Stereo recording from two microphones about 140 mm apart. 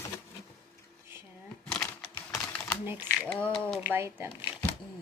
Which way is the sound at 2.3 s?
5° left (ahead or behind).